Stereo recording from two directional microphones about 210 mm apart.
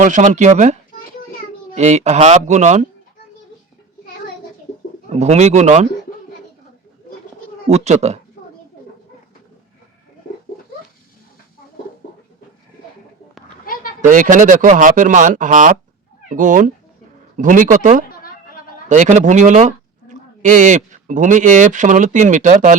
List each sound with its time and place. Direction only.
0.0 s speech: 35° right (ahead or behind)
5.1 s speech: 30° right (ahead or behind)
7.7 s speech: 30° right (ahead or behind)
14.1 s speech: 40° right (ahead or behind)